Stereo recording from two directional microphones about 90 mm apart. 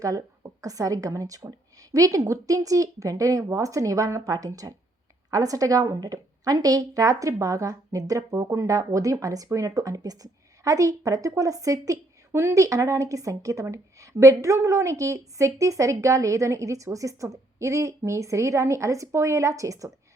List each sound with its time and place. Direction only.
0.0 s a woman's voice: 40° right (ahead or behind)